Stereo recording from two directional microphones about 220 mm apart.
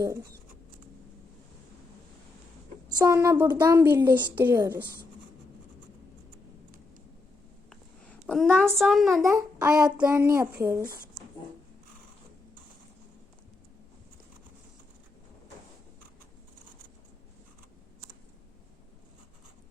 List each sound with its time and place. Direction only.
0.0 s a woman's voice: 15° right (ahead or behind)
3.0 s a woman's voice: 10° right (ahead or behind)
7.7 s a sound: centre (ahead or behind)
8.8 s speech: centre (ahead or behind)
9.3 s a woman's voice: 15° right (ahead or behind)